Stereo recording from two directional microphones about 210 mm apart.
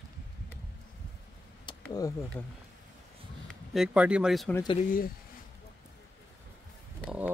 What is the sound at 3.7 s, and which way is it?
Speech, 5° right (ahead or behind).